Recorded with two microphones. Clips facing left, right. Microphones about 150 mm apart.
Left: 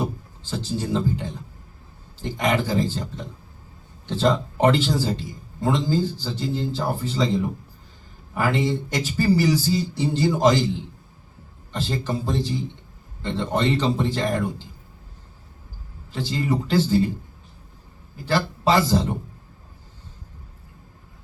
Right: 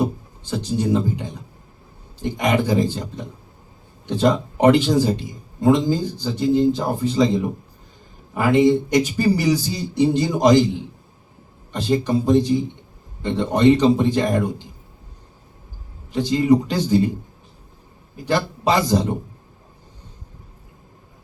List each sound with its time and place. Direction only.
0.0 s a man's voice: 15° right (ahead or behind)
16.1 s a man's voice: 15° right (ahead or behind)
18.3 s a man's voice: 15° right (ahead or behind)